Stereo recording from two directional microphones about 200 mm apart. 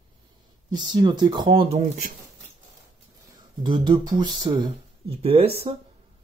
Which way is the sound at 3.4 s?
20° right (ahead or behind).